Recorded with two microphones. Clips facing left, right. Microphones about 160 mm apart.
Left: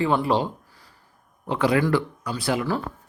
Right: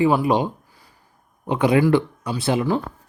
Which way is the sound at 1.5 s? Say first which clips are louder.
Right 4 dB; 20° right (ahead or behind).